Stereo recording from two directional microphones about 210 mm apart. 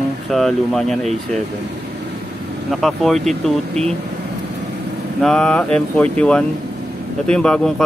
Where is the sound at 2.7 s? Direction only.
Centre (ahead or behind).